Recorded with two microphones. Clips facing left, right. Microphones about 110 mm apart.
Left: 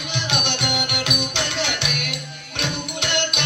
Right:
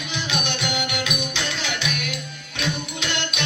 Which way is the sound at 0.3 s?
65° left (ahead or behind).